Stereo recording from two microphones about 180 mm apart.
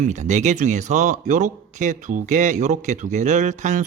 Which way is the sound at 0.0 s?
40° right (ahead or behind).